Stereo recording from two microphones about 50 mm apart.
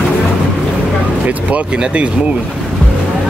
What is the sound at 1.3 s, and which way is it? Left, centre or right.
Speech, right.